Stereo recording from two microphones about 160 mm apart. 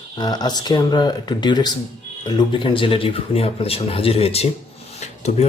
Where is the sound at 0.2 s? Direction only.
25° left (ahead or behind).